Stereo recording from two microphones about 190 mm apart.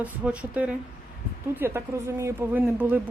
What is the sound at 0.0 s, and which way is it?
Speech, 5° right (ahead or behind).